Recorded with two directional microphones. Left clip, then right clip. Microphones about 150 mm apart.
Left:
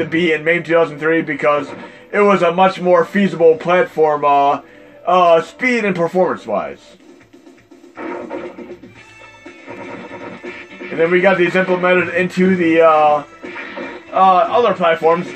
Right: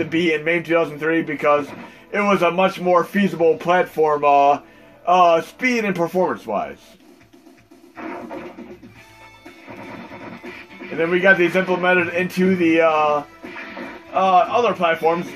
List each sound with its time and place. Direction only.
0.0 s speech: 35° left (ahead or behind)
11.0 s speech: 35° left (ahead or behind)
14.1 s speech: 35° left (ahead or behind)